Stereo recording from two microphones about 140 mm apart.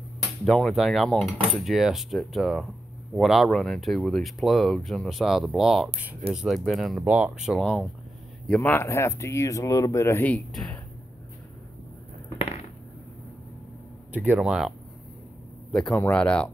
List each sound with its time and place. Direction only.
0.5 s speech: centre (ahead or behind)
7.0 s speech: 10° right (ahead or behind)
8.5 s speech: 10° left (ahead or behind)
14.1 s speech: 10° right (ahead or behind)
15.7 s speech: 5° left (ahead or behind)